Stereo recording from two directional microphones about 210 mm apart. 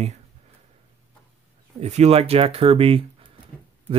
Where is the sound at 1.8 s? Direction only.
30° right (ahead or behind).